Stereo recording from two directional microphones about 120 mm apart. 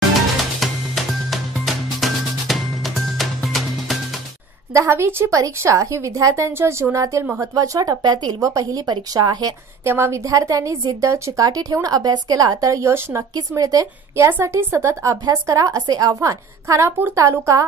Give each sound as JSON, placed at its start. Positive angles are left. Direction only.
{"t": 0.6, "sound": "music", "side_deg": 0}
{"t": 4.7, "sound": "a woman's voice", "side_deg": -20}
{"t": 9.8, "sound": "a woman's voice", "side_deg": -20}